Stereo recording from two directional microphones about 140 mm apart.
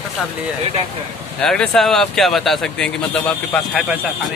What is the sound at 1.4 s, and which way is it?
Speech, 5° left (ahead or behind).